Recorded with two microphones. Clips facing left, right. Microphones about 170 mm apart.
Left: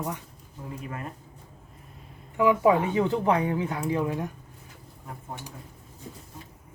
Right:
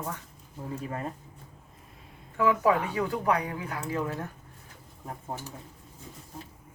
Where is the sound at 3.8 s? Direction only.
15° left (ahead or behind).